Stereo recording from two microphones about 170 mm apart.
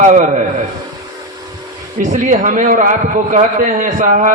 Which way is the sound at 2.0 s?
45° right (ahead or behind).